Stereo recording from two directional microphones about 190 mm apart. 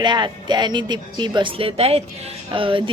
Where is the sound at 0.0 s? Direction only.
25° right (ahead or behind).